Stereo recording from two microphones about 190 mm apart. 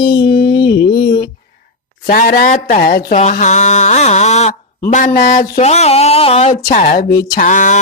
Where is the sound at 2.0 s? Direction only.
45° left (ahead or behind).